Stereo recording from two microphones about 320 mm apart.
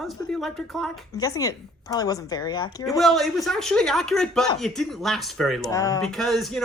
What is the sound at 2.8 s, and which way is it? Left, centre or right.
Speech, centre.